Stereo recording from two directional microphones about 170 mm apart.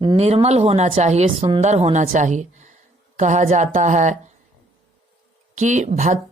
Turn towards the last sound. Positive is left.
turn(degrees=-45)  # may be behind; listen again after turning